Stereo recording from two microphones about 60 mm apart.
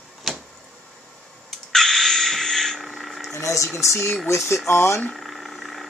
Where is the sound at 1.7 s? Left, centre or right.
Centre.